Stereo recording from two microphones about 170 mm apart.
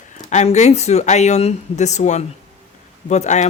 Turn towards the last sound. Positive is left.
turn(degrees=45)  # may be behind; listen again after turning